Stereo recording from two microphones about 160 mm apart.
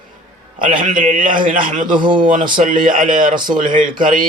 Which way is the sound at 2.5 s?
55° right (ahead or behind).